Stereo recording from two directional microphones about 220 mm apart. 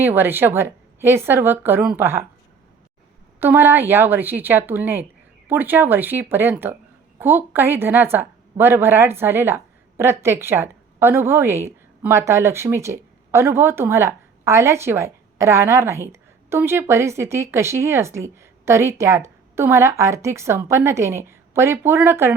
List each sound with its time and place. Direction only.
0.0 s speech: 10° right (ahead or behind)
3.4 s speech: 10° right (ahead or behind)